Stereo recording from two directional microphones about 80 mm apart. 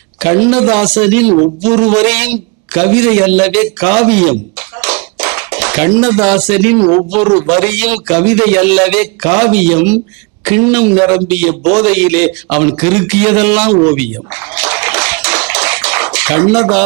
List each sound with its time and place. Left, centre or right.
0.2 s speech: right
14.5 s tap: centre